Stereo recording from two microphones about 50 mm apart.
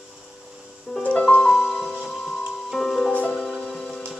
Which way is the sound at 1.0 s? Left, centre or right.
Left.